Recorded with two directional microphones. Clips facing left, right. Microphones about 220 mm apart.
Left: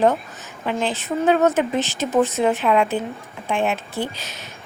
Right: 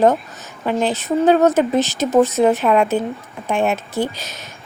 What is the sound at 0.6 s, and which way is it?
Speech, 45° right (ahead or behind).